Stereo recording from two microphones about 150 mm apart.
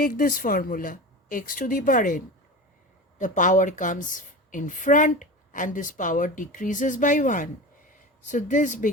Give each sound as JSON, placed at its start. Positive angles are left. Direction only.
{"t": 0.0, "sound": "a woman's voice", "side_deg": 65}